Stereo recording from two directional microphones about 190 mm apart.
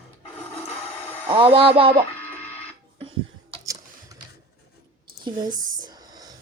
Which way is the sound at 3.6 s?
20° right (ahead or behind).